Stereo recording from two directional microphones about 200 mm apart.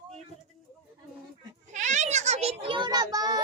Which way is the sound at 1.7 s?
35° right (ahead or behind).